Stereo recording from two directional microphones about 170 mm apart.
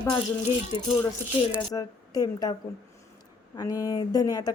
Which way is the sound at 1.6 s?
20° left (ahead or behind).